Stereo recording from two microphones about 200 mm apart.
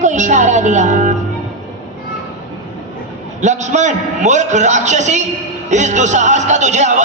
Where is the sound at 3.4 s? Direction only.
35° right (ahead or behind).